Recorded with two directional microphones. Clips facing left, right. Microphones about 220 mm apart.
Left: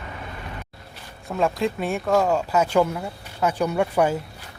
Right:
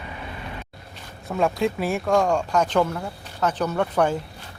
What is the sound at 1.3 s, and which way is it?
Speech, centre (ahead or behind).